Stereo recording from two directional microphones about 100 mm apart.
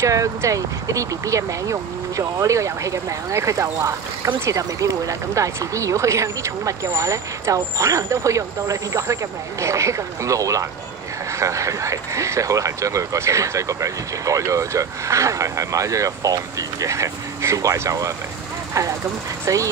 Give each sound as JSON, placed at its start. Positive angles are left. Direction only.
{"t": 0.0, "sound": "speech", "side_deg": -30}